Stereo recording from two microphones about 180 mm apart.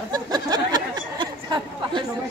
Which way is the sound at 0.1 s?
25° right (ahead or behind).